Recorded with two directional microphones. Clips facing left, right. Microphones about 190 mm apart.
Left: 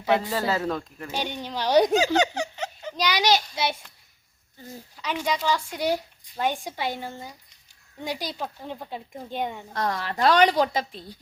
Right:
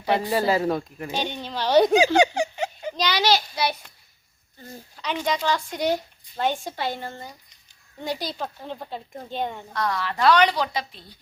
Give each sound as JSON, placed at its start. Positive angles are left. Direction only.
{"t": 0.2, "sound": "a man's voice", "side_deg": -15}
{"t": 1.1, "sound": "speech", "side_deg": 10}
{"t": 2.1, "sound": "giggle", "side_deg": -10}
{"t": 2.9, "sound": "speech", "side_deg": 10}
{"t": 4.7, "sound": "speech", "side_deg": 10}
{"t": 9.7, "sound": "a woman's voice", "side_deg": 45}